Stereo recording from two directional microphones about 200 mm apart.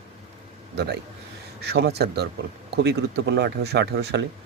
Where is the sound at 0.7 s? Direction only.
55° right (ahead or behind).